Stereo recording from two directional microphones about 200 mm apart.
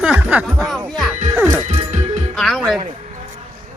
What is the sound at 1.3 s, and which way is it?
Music, 10° right (ahead or behind).